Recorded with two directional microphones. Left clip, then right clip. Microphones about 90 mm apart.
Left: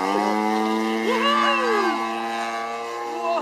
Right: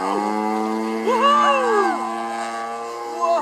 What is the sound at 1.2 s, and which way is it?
Music, 35° right (ahead or behind).